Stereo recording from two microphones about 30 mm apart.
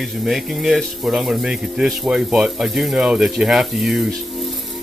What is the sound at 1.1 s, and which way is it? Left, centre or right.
Speech, centre.